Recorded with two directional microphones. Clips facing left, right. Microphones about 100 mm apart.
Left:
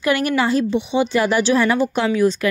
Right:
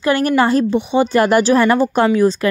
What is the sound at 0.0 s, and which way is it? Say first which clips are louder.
A woman's voice: right 4 dB; 35° right (ahead or behind).